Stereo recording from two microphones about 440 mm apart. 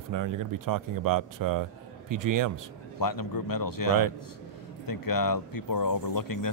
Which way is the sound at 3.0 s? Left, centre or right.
Left.